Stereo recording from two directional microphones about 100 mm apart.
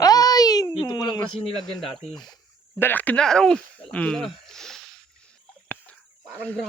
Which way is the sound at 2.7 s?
20° left (ahead or behind).